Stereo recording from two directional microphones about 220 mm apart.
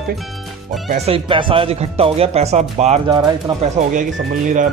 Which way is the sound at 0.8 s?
30° right (ahead or behind).